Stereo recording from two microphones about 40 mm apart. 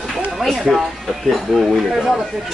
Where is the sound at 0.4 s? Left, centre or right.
Centre.